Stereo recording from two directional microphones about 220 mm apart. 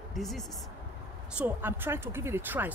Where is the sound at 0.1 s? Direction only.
Centre (ahead or behind).